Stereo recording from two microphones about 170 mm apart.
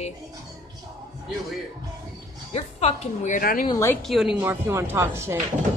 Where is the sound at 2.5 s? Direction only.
40° left (ahead or behind); by 3.6 s 55° left (ahead or behind).